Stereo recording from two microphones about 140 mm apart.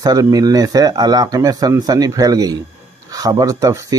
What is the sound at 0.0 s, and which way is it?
Speech, 25° right (ahead or behind).